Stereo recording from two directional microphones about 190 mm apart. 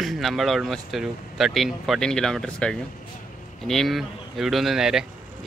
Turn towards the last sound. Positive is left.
turn(degrees=0)  # may be behind; listen again after turning